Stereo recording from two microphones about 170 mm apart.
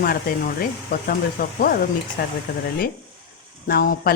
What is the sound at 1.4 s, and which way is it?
Speech, 60° left (ahead or behind).